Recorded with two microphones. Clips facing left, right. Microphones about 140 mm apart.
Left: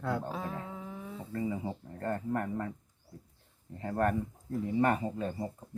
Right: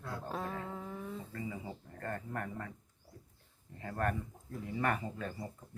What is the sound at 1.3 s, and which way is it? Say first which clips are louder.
Speech: left 8 dB; 35° left (ahead or behind).